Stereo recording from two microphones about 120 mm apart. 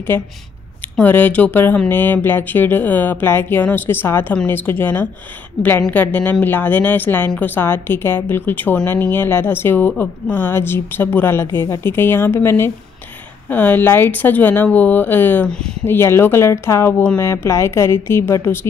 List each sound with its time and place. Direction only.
0.9 s a woman's voice: 15° left (ahead or behind)
15.8 s a woman's voice: 20° left (ahead or behind)